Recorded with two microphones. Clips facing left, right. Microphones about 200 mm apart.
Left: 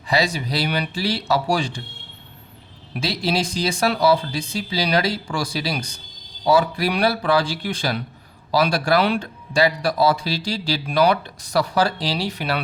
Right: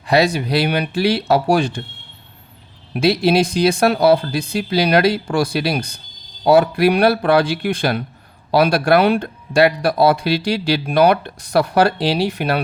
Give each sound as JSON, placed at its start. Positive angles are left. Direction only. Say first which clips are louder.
{"t": 0.1, "sound": "speech", "louder": "right 6 dB", "side_deg": -60}
{"t": 2.9, "sound": "speech", "louder": "right 8 dB", "side_deg": -60}